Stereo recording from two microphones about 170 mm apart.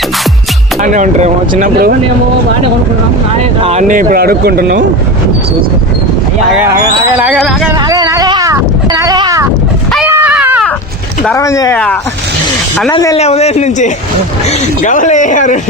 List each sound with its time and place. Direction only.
0.8 s speech: 45° right (ahead or behind)
3.6 s speech: 40° right (ahead or behind); by 4.8 s 65° right (ahead or behind)
6.5 s speech: 10° right (ahead or behind)
7.9 s a sound: 20° right (ahead or behind)
10.1 s a sound: 10° right (ahead or behind)
11.3 s speech: 20° left (ahead or behind)
12.9 s speech: 20° left (ahead or behind)
13.1 s a man's voice: 40° left (ahead or behind)